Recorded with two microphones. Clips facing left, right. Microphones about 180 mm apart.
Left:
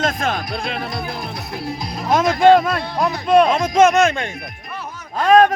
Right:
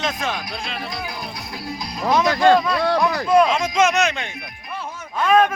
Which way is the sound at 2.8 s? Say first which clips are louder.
Right 3 dB; 90° right.